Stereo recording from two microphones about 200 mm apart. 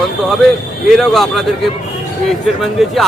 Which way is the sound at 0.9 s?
Centre (ahead or behind).